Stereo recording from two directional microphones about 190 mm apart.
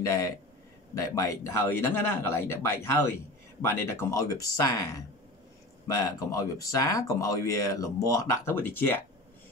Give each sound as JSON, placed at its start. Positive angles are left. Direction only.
{"t": 0.0, "sound": "speech", "side_deg": 15}